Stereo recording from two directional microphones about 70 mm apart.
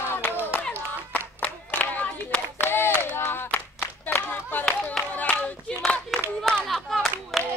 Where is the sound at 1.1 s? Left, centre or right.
Left.